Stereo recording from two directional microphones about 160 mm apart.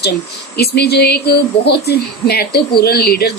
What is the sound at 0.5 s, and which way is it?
A woman's voice, 90° left.